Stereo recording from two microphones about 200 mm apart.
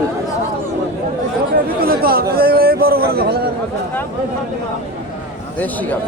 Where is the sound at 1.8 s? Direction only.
50° right (ahead or behind).